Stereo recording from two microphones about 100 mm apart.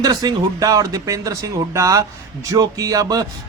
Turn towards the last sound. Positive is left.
turn(degrees=-35)  # may be behind; listen again after turning